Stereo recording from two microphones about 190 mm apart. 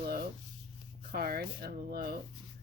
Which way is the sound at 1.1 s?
55° right (ahead or behind).